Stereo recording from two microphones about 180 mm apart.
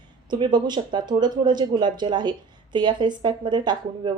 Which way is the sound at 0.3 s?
25° right (ahead or behind).